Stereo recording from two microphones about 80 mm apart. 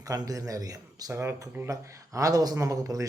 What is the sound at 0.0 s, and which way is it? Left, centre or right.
Speech, right.